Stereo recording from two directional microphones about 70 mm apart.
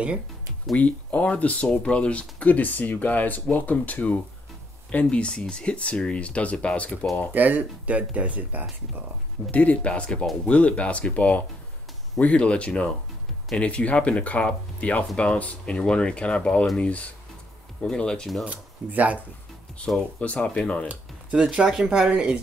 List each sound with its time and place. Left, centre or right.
0.7 s speech: left
7.3 s speech: right
9.5 s speech: centre
18.4 s speech: right
20.2 s speech: centre
20.9 s speech: centre